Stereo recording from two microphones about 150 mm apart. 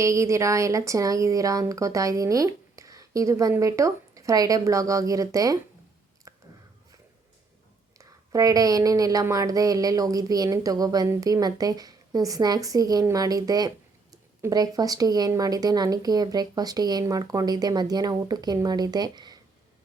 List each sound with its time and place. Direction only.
0.0 s speech: 20° right (ahead or behind)
6.3 s chewing: 20° right (ahead or behind)
7.9 s speech: 20° right (ahead or behind)